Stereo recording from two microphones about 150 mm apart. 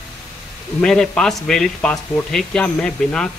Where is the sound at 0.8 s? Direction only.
5° left (ahead or behind).